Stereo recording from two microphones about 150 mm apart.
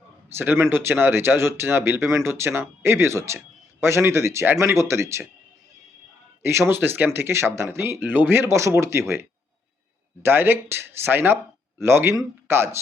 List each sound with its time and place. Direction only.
0.3 s speech: 15° right (ahead or behind)
6.4 s speech: 15° right (ahead or behind)
10.2 s speech: 15° right (ahead or behind)